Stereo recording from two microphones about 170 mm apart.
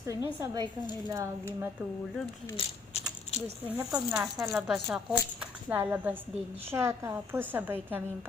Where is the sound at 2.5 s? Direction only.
35° left (ahead or behind).